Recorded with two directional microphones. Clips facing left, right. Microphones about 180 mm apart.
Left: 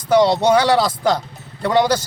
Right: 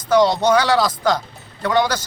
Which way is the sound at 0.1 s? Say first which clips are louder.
Left 1 dB; 30° left (ahead or behind).